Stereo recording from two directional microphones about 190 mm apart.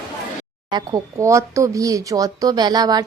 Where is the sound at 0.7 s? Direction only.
20° right (ahead or behind).